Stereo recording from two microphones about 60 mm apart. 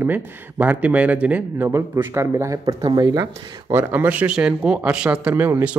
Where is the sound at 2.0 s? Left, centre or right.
Right.